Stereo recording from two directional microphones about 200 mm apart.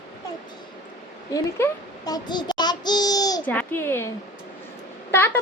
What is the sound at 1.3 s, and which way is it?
Child singing, 20° left (ahead or behind).